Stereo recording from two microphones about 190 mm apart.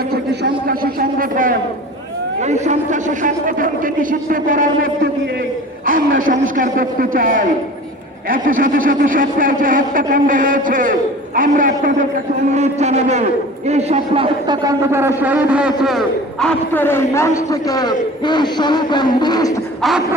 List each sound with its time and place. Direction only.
0.7 s a sound: 50° right (ahead or behind)
2.4 s a man's voice: 40° right (ahead or behind)
14.4 s a man's voice: 20° right (ahead or behind); by 19.5 s 20° left (ahead or behind)